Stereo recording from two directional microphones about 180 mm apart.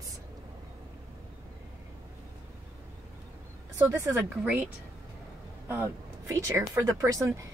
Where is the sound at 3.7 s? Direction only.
15° right (ahead or behind).